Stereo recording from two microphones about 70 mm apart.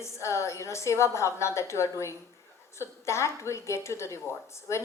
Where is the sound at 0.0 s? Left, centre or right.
Left.